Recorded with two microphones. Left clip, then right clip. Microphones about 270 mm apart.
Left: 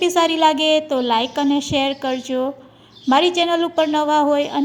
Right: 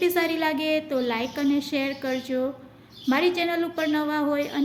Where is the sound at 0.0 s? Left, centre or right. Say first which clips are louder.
Left 8 dB; left.